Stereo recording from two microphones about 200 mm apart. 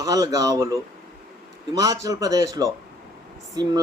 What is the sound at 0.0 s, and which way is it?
Speech, 20° right (ahead or behind).